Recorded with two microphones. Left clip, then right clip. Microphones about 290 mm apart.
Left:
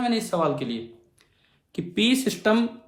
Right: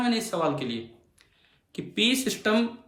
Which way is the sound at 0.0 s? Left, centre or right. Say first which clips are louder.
Left 2 dB; centre.